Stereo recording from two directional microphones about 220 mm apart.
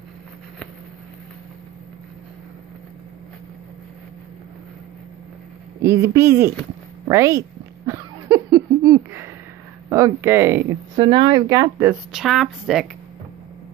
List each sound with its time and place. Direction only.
5.8 s speech: 15° right (ahead or behind)
7.1 s giggle: 15° right (ahead or behind)
9.8 s speech: 15° right (ahead or behind)
11.1 s speech: 20° right (ahead or behind)
12.1 s speech: centre (ahead or behind)